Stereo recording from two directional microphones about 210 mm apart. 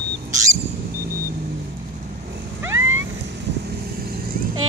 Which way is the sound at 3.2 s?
50° right (ahead or behind).